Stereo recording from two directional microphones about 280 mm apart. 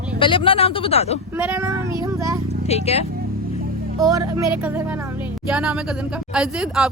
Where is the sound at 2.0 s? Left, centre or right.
Centre.